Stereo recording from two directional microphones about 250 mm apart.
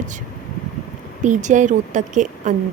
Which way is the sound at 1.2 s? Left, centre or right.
Right.